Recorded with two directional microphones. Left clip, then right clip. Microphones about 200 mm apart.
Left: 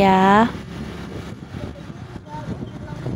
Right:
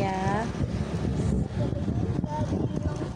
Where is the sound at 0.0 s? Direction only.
50° left (ahead or behind).